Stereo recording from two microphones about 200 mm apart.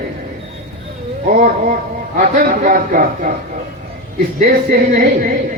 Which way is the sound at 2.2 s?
45° right (ahead or behind).